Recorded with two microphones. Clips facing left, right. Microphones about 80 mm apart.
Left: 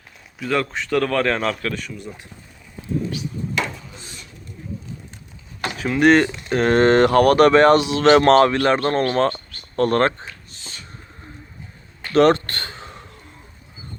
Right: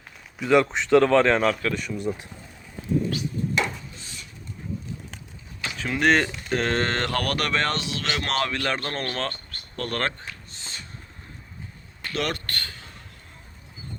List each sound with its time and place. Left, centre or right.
0.3 s speech: centre
5.8 s speech: centre
8.0 s speech: left
12.1 s a sound: left